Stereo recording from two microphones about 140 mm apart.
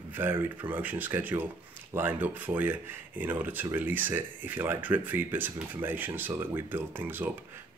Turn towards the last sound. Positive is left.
turn(degrees=-15)  # may be behind; listen again after turning